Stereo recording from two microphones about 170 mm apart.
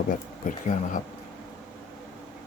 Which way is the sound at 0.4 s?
50° left (ahead or behind).